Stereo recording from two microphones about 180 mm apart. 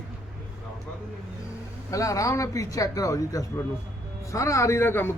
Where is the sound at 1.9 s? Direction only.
20° left (ahead or behind).